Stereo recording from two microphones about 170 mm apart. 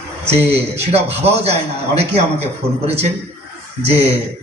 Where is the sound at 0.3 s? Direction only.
35° right (ahead or behind).